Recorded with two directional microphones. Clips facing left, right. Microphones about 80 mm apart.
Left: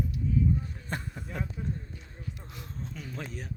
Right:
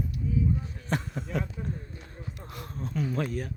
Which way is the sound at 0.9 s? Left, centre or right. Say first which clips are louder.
Right 9 dB; right.